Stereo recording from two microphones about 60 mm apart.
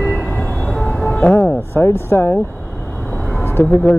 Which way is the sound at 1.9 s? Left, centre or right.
Left.